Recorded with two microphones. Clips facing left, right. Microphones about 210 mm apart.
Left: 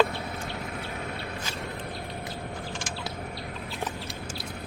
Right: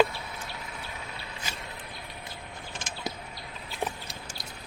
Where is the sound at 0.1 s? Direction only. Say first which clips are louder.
Left 6 dB; 60° left (ahead or behind).